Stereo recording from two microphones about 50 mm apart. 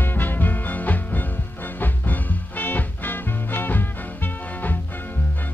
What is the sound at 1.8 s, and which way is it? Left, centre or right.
Swing music, left.